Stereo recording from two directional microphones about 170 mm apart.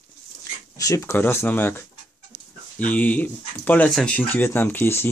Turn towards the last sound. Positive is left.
turn(degrees=10)  # may be behind; listen again after turning